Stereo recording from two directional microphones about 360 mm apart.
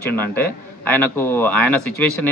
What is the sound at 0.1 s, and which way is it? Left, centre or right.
Speech, centre.